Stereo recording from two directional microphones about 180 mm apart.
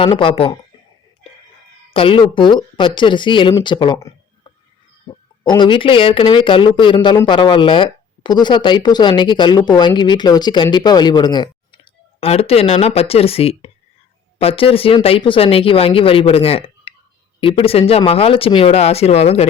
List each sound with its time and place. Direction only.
0.0 s speech: 30° left (ahead or behind)
1.9 s speech: 30° left (ahead or behind)
5.4 s speech: 25° left (ahead or behind)